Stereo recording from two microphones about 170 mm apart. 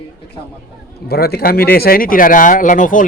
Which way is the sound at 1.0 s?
65° left (ahead or behind).